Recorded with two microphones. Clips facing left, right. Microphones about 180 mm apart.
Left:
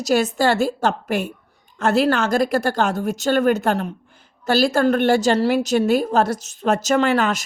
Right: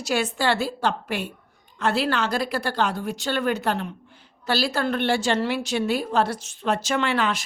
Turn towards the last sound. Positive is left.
turn(degrees=45)  # may be behind; listen again after turning